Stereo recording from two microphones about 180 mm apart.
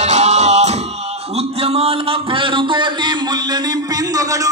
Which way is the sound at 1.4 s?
35° right (ahead or behind).